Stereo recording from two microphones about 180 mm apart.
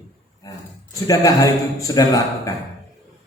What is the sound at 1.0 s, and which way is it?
A man's voice, 20° left (ahead or behind).